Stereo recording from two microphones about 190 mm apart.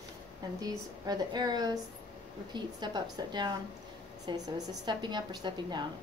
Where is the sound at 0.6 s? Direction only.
20° right (ahead or behind).